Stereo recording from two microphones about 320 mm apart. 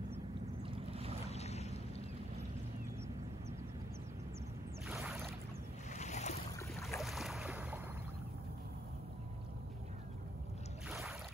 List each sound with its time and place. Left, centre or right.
0.7 s boat: centre
1.2 s boat: centre
4.8 s a sound: centre
5.9 s boat: left
6.7 s boat: centre
10.9 s a sound: centre